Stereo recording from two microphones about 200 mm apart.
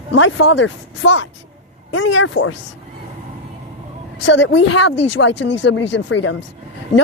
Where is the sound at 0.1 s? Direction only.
65° left (ahead or behind).